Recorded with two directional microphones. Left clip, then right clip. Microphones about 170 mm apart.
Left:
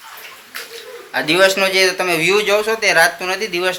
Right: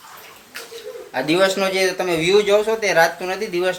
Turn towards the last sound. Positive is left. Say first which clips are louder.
# left 3 dB
turn(degrees=-10)  # may be behind; listen again after turning